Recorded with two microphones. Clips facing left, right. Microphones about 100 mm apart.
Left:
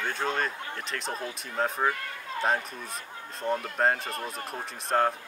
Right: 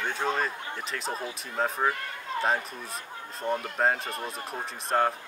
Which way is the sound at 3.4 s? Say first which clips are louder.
Even; 15° right (ahead or behind).